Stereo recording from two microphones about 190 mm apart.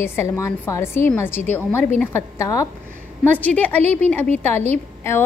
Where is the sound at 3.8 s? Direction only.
35° right (ahead or behind).